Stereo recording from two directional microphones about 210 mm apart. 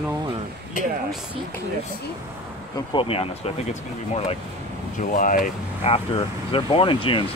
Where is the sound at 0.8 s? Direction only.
40° left (ahead or behind).